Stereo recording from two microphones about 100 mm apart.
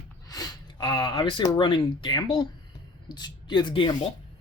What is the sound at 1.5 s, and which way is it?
Speech, 60° left (ahead or behind).